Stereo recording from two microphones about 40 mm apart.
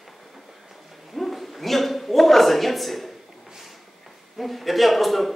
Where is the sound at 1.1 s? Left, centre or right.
Centre.